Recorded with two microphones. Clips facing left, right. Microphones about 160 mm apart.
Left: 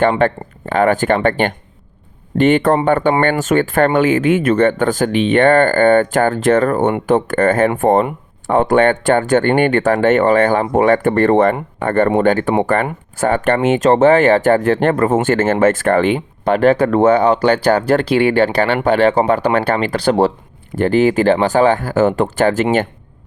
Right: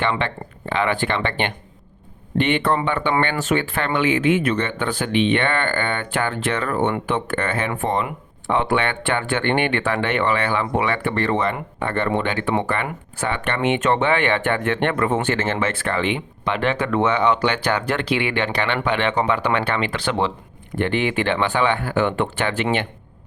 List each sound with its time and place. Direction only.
0.0 s speech: 45° left (ahead or behind)